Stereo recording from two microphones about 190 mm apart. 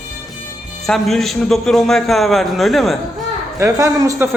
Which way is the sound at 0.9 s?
Centre (ahead or behind).